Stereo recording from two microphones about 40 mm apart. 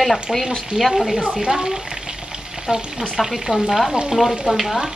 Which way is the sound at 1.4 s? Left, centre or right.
Centre.